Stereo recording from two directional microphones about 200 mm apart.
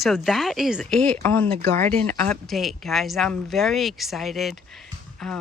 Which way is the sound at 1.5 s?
30° right (ahead or behind).